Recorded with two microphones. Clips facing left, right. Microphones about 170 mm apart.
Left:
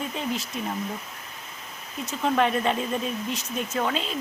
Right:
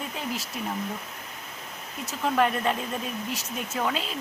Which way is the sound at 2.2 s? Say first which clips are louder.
Left 1 dB; centre (ahead or behind).